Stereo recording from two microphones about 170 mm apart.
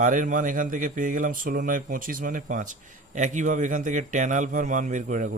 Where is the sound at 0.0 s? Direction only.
50° right (ahead or behind).